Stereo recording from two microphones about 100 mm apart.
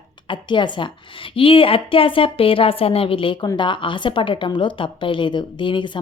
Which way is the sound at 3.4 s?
50° left (ahead or behind).